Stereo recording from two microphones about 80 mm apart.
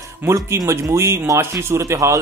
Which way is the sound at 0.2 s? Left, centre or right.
Right.